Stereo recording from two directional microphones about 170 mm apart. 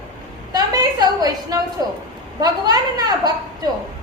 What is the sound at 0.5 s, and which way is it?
A woman's voice, 20° right (ahead or behind).